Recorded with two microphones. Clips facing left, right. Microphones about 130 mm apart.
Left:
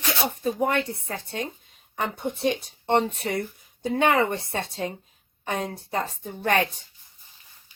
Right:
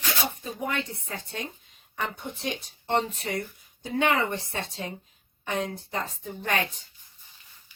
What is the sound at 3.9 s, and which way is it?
A woman's voice, 40° left (ahead or behind).